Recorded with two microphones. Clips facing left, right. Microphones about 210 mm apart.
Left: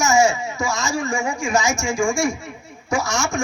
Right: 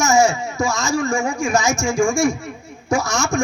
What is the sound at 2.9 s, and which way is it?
Speech, 40° right (ahead or behind).